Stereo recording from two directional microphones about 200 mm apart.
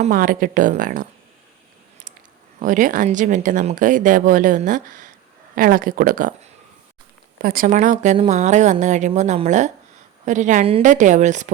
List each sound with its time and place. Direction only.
0.0 s speech: 45° right (ahead or behind)
2.6 s speech: 40° right (ahead or behind)